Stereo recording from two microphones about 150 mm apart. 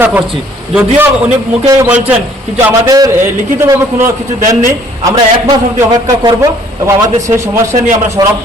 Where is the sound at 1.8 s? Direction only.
10° right (ahead or behind).